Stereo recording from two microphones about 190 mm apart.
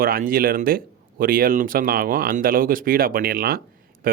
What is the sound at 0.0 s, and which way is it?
Speech, 50° right (ahead or behind).